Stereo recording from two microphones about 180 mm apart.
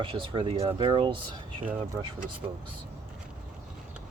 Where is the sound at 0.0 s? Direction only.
30° right (ahead or behind).